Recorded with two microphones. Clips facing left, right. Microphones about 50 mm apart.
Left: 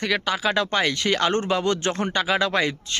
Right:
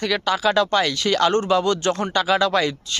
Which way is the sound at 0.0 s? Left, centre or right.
Centre.